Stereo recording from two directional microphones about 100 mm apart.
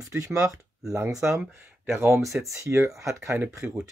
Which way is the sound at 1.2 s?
20° right (ahead or behind).